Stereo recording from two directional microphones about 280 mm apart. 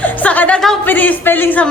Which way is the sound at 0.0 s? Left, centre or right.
Centre.